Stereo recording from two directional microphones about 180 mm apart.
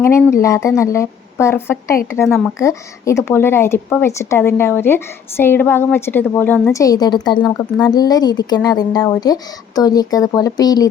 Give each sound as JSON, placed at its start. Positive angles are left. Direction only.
{"t": 0.0, "sound": "speech", "side_deg": 15}